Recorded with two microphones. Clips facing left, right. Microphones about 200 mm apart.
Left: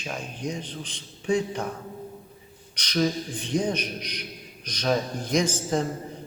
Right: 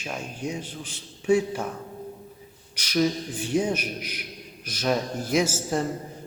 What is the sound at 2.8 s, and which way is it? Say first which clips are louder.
A man's voice: right 1 dB; 5° right (ahead or behind).